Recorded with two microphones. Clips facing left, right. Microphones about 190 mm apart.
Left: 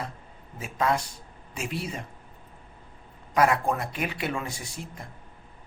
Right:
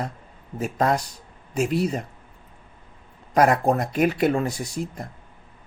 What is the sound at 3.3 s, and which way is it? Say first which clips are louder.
Speech: right 5 dB; 40° right (ahead or behind).